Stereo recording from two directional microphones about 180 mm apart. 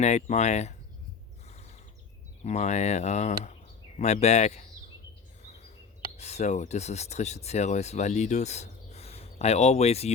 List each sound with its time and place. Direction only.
0.0 s speech: 40° left (ahead or behind)
2.4 s speech: 40° left (ahead or behind)
6.1 s speech: 35° left (ahead or behind)